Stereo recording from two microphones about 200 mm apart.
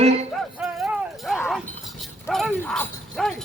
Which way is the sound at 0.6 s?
Centre (ahead or behind).